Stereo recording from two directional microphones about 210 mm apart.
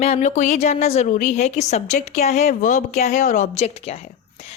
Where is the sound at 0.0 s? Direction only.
35° left (ahead or behind).